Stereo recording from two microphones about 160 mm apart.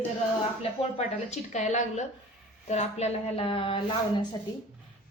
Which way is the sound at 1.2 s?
45° left (ahead or behind).